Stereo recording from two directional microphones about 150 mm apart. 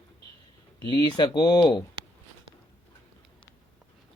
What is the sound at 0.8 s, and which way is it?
Speech, 30° left (ahead or behind).